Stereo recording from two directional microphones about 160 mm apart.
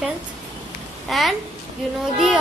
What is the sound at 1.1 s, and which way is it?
Speech, centre (ahead or behind).